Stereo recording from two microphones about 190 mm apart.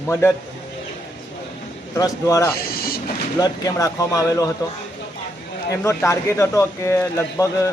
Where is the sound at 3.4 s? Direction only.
15° left (ahead or behind).